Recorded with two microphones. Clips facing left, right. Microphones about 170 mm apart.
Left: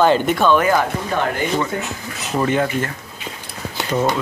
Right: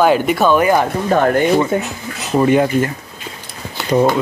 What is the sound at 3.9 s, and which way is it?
Speech, 20° right (ahead or behind).